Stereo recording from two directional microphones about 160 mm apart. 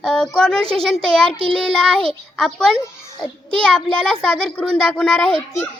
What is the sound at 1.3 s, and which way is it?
Child singing, 35° right (ahead or behind).